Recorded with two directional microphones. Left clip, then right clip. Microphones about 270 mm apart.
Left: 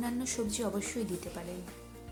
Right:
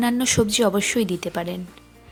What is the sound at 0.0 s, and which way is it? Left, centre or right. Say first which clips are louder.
A woman's voice: right 15 dB; left.